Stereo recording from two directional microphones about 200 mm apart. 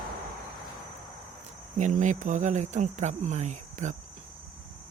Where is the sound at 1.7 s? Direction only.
35° right (ahead or behind).